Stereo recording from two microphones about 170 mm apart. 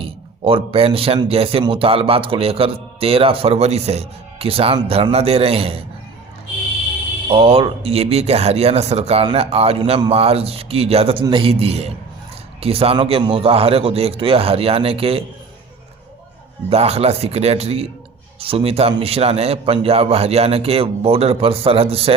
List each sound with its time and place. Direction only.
0.0 s speech: 35° right (ahead or behind)
7.3 s speech: 35° right (ahead or behind)
16.6 s speech: 35° right (ahead or behind)